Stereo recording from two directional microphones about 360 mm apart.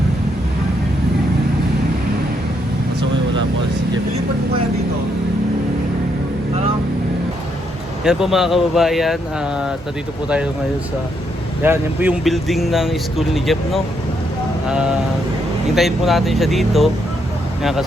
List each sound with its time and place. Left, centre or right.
8.0 s speech: centre
11.6 s speech: centre